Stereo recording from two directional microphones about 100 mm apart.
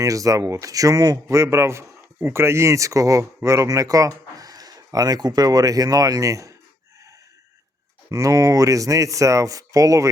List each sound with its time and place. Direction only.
0.0 s speech: 35° right (ahead or behind)
8.1 s speech: 35° right (ahead or behind)